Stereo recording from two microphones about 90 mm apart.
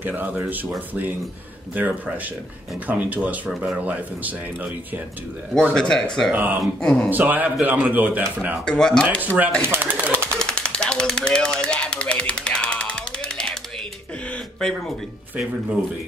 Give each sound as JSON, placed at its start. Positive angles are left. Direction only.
{"t": 0.0, "sound": "speech", "side_deg": -20}
{"t": 5.7, "sound": "speech", "side_deg": 10}
{"t": 6.3, "sound": "speech", "side_deg": -20}
{"t": 6.6, "sound": "speech", "side_deg": 5}
{"t": 7.1, "sound": "speech", "side_deg": -20}
{"t": 8.6, "sound": "speech", "side_deg": 10}
{"t": 9.2, "sound": "speech", "side_deg": -20}
{"t": 9.6, "sound": "a sound", "side_deg": -25}
{"t": 10.4, "sound": "jackhammer", "side_deg": 10}
{"t": 14.3, "sound": "a sound", "side_deg": 5}